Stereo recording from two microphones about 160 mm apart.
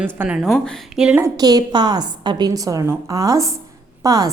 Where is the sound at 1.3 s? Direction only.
25° right (ahead or behind).